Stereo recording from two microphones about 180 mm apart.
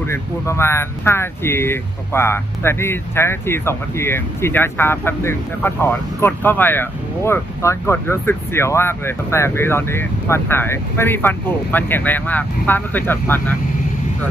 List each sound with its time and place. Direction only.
0.0 s speech: 15° left (ahead or behind)